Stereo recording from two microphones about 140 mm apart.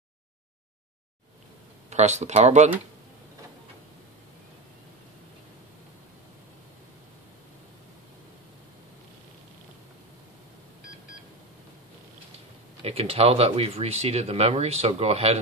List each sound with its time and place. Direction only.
1.9 s speech: 55° right (ahead or behind)
12.8 s speech: 45° right (ahead or behind)